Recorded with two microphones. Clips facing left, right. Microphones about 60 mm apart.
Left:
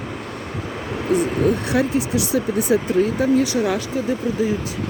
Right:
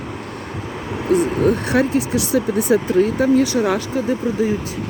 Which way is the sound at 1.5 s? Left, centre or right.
Right.